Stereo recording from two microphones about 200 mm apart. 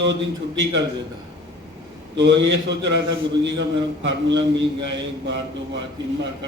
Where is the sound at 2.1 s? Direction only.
65° right (ahead or behind).